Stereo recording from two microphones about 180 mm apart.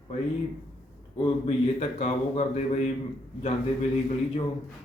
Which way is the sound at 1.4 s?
35° left (ahead or behind).